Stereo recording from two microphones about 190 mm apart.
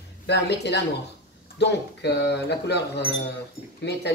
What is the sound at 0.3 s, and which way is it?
Speech, 60° left (ahead or behind).